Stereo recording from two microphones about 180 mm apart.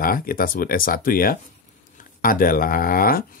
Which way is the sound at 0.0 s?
50° left (ahead or behind).